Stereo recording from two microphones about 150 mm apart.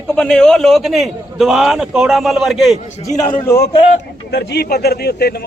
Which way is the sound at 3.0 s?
30° left (ahead or behind).